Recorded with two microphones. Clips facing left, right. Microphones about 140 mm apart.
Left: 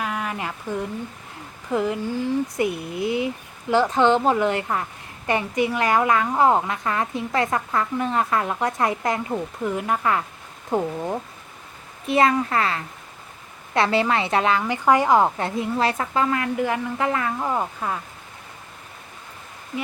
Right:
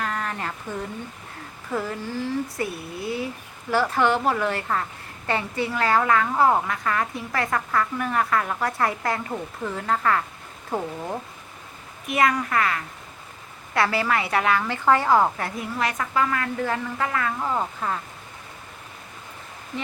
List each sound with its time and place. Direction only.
0.0 s a sound: 10° left (ahead or behind)
1.7 s a woman's voice: 15° left (ahead or behind)
12.0 s a woman's voice: 25° left (ahead or behind)
17.5 s speech: 10° left (ahead or behind)